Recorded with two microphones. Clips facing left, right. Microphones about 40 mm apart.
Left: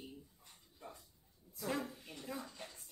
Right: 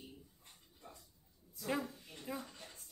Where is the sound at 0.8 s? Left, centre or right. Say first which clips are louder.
Left 4 dB; left.